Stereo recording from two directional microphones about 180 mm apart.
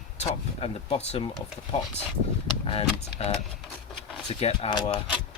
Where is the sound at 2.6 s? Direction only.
30° left (ahead or behind).